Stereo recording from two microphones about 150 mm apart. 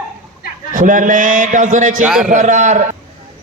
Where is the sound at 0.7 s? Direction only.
60° right (ahead or behind).